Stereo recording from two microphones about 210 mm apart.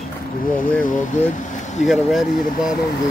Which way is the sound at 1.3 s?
35° left (ahead or behind).